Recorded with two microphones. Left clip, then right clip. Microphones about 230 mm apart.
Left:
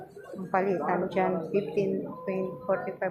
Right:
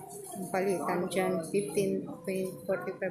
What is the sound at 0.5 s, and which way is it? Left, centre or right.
Speech, centre.